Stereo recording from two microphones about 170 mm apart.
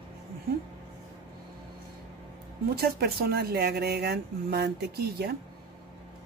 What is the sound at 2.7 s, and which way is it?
Speech, 65° right (ahead or behind).